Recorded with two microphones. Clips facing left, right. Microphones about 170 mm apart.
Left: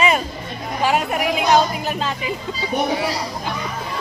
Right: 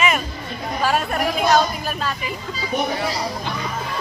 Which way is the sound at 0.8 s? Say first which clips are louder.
Left 2 dB; 15° left (ahead or behind).